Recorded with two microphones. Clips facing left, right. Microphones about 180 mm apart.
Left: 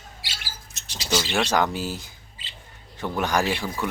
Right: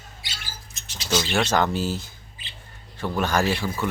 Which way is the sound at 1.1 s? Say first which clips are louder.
Right 1 dB; 5° left (ahead or behind).